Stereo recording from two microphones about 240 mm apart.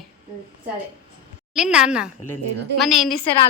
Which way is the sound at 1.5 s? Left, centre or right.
Centre.